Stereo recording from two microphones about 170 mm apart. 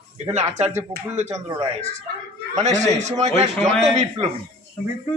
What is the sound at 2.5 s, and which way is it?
Speech, 45° right (ahead or behind).